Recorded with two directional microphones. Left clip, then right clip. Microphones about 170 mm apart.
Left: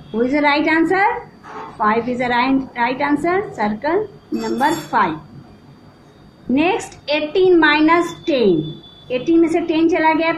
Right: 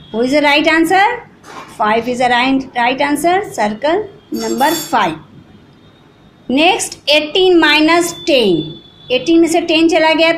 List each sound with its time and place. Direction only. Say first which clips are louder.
0.2 s a woman's voice: right 5 dB; 30° right (ahead or behind)
6.5 s a woman's voice: right 6 dB; 30° right (ahead or behind)